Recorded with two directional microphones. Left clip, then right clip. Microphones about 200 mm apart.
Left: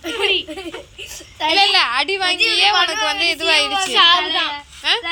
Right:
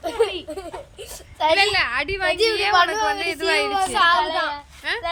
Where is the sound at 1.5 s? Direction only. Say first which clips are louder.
Left 5 dB; 10° right (ahead or behind).